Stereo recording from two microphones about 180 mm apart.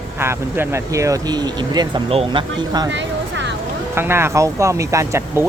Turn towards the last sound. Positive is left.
turn(degrees=-15)  # may be behind; listen again after turning